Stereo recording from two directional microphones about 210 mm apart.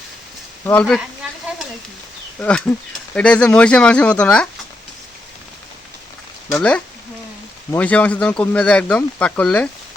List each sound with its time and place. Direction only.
0.6 s speech: 5° left (ahead or behind)
2.4 s speech: 5° left (ahead or behind)
6.5 s speech: 5° left (ahead or behind)